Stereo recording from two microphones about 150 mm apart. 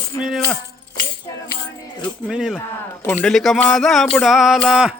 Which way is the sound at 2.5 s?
15° left (ahead or behind).